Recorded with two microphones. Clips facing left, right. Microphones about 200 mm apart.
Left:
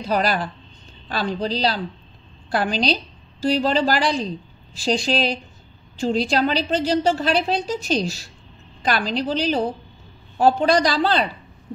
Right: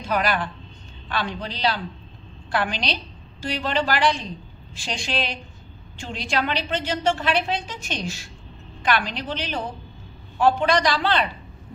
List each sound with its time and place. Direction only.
0.0 s a woman's voice: 35° left (ahead or behind)